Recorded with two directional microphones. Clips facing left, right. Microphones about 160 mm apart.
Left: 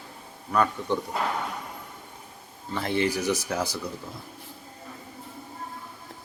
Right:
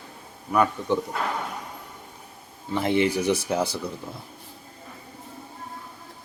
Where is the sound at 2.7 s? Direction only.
20° right (ahead or behind).